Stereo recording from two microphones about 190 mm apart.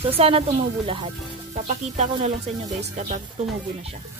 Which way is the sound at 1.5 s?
35° right (ahead or behind).